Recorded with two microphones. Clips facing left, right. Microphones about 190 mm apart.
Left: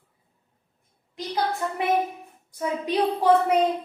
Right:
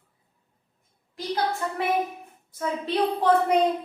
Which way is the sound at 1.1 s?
15° left (ahead or behind).